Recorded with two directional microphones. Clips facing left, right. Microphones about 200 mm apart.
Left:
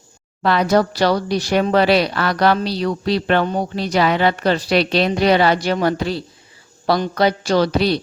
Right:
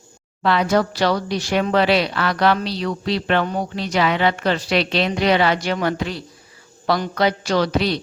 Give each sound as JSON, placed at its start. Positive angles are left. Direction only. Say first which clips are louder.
{"t": 0.4, "sound": "speech", "louder": "left 2 dB", "side_deg": 40}